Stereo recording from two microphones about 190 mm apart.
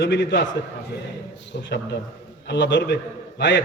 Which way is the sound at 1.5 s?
65° left (ahead or behind).